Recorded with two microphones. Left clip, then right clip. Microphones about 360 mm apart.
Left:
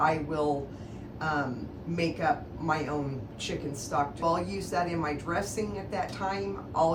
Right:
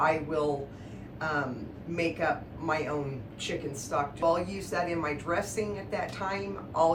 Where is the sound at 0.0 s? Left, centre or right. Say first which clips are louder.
Even; centre.